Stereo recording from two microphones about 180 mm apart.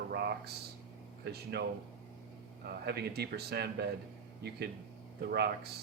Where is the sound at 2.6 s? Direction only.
60° right (ahead or behind).